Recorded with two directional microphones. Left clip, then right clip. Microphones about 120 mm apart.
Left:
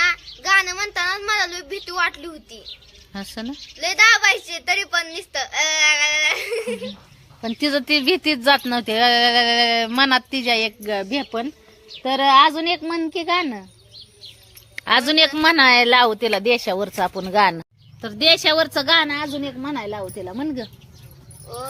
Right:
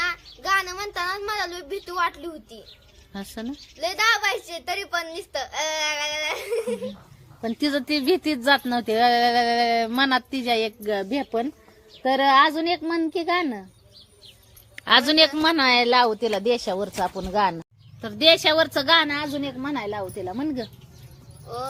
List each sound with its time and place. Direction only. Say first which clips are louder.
0.0 s a child's voice: left 7 dB; 30° right (ahead or behind)
3.1 s speech: left 3 dB; 25° left (ahead or behind)
3.8 s a child's voice: left 7 dB; 30° right (ahead or behind)
7.4 s speech: left 4 dB; 20° left (ahead or behind)
14.8 s speech: left 1 dB; 15° left (ahead or behind)
15.4 s a woman's voice: left 5 dB; 25° left (ahead or behind)